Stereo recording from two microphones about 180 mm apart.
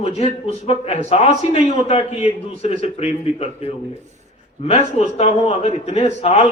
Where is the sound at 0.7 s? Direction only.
40° left (ahead or behind).